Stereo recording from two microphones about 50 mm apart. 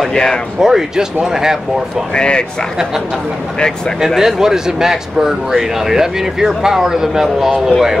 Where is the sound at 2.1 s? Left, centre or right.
Centre.